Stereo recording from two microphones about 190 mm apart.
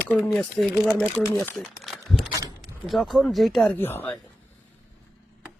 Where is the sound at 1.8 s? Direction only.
Centre (ahead or behind).